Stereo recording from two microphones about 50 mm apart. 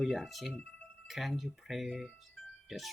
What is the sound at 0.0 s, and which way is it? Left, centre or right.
Speech, centre.